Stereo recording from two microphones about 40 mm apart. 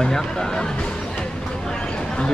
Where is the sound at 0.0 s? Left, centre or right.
Centre.